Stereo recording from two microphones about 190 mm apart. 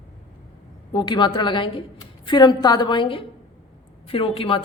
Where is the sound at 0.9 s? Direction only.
20° left (ahead or behind).